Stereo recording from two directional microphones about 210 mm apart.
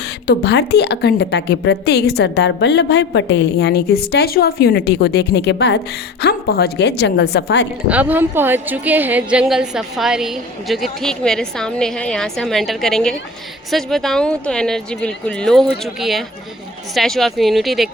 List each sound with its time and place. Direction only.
0.3 s a woman's voice: 50° left (ahead or behind)
7.9 s a woman's voice: 5° right (ahead or behind)